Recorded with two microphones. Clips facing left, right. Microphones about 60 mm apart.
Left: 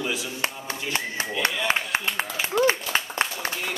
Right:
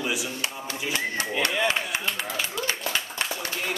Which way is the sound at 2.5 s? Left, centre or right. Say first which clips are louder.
Left 11 dB; left.